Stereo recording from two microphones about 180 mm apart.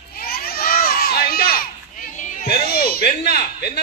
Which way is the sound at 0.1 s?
55° left (ahead or behind).